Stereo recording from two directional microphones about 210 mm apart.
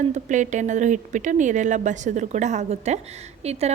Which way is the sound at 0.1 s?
35° right (ahead or behind).